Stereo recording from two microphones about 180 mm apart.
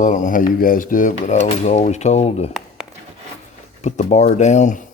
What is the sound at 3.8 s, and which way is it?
Speech, 40° left (ahead or behind).